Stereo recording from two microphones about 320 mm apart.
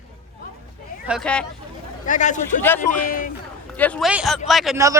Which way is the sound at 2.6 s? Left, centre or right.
Centre.